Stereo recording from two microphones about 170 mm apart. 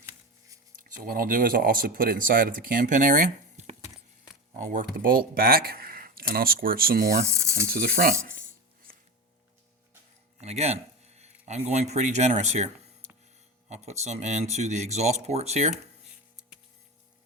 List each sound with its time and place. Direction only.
1.0 s speech: 55° right (ahead or behind)
7.3 s speech: 15° right (ahead or behind)
7.7 s speech: 55° right (ahead or behind)
10.4 s speech: 40° right (ahead or behind)